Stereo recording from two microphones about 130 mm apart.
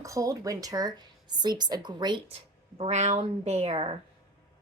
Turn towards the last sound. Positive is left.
turn(degrees=-50)  # may be behind; listen again after turning